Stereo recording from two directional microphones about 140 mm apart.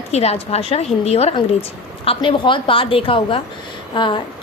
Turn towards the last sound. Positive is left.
turn(degrees=35)  # may be behind; listen again after turning